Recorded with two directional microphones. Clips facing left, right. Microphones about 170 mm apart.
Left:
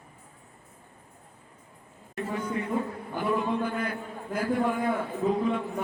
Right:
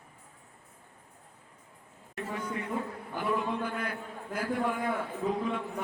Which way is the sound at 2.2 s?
30° left (ahead or behind).